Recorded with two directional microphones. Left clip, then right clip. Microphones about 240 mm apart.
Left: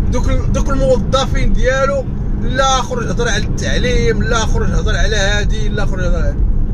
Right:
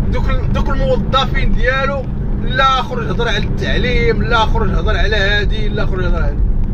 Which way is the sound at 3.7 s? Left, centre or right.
Left.